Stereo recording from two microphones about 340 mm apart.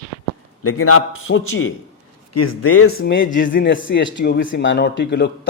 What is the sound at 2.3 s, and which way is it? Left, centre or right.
A man's voice, left.